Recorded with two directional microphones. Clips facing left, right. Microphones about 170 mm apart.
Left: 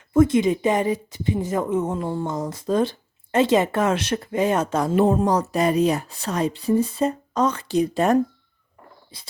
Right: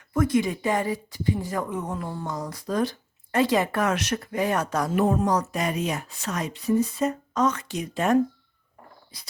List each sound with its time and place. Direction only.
0.1 s speech: 25° left (ahead or behind)